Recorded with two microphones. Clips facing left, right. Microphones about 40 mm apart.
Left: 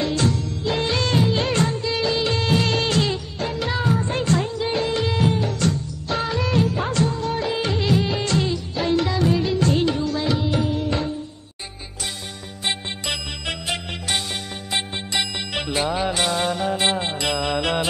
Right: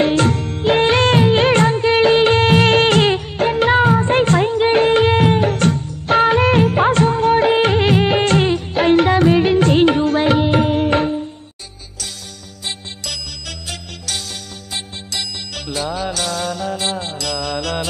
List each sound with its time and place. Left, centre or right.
0.0 s music: right
12.6 s music: left